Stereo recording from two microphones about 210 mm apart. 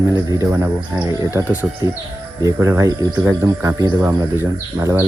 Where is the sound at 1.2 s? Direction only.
15° right (ahead or behind).